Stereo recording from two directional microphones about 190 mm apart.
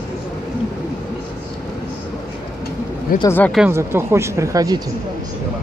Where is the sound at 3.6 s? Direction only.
15° right (ahead or behind).